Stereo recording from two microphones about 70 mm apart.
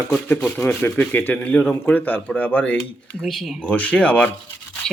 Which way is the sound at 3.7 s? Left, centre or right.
Left.